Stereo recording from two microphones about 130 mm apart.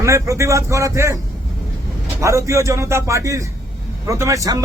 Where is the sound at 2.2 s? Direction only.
25° right (ahead or behind).